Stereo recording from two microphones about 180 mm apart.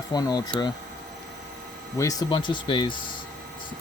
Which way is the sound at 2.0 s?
20° left (ahead or behind).